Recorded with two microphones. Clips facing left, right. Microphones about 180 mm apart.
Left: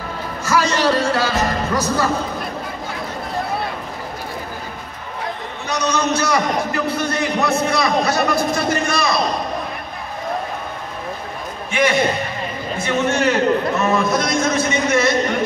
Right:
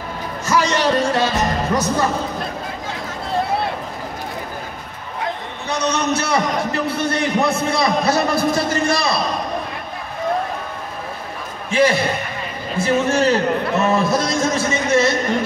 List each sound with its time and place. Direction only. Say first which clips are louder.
0.5 s speech: even; 20° right (ahead or behind)
5.7 s a man's voice: even; 25° right (ahead or behind)
11.7 s a man's voice: right 1 dB; 35° right (ahead or behind)